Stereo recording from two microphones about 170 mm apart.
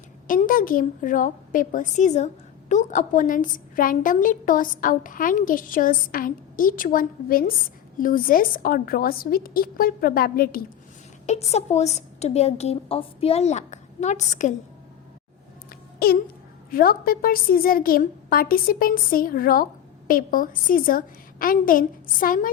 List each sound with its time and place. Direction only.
0.3 s a woman's voice: 55° left (ahead or behind)
11.3 s a woman's voice: 40° left (ahead or behind)
16.0 s a child's voice: 65° left (ahead or behind)